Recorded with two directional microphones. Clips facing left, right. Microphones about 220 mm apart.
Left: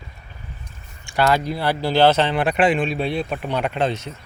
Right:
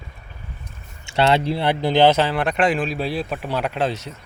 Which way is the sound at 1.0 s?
25° right (ahead or behind).